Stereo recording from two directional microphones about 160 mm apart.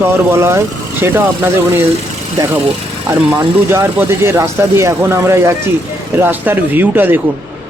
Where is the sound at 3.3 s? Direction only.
15° right (ahead or behind).